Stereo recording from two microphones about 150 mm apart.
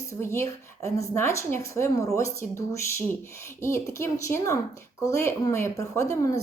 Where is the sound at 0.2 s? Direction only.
20° left (ahead or behind).